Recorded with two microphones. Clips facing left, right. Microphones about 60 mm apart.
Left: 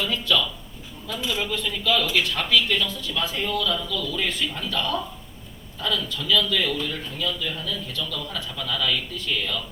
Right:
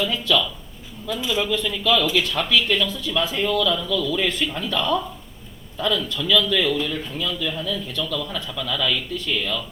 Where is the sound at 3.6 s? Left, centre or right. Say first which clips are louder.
Right 4 dB; right.